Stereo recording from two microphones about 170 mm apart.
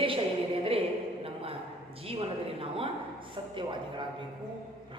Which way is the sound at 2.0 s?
35° right (ahead or behind).